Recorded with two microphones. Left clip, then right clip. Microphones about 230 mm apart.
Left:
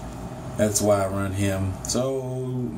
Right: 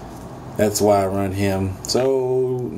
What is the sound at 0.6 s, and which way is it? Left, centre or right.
Speech, right.